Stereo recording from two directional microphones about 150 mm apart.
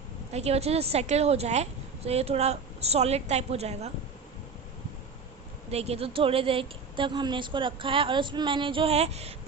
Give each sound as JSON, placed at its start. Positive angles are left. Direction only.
{"t": 0.3, "sound": "a woman's voice", "side_deg": -45}
{"t": 5.7, "sound": "a woman's voice", "side_deg": -45}